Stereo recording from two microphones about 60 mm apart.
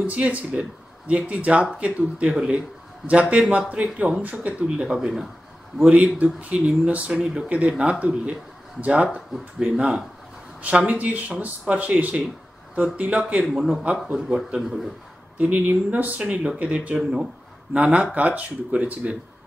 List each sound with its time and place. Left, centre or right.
0.0 s speech: right; by 5.3 s centre
5.9 s a man's voice: right
13.5 s a man's voice: centre; by 19.1 s right